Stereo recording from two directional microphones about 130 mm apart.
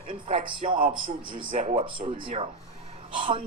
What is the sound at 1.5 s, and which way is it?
Speech, 60° right (ahead or behind).